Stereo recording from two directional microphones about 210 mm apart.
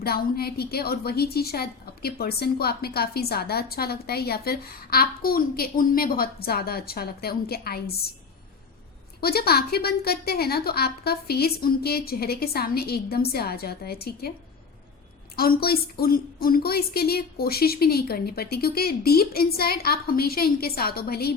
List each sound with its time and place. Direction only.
0.0 s a woman's voice: 45° left (ahead or behind)
9.2 s a woman's voice: 50° left (ahead or behind)
15.4 s a woman's voice: 45° left (ahead or behind)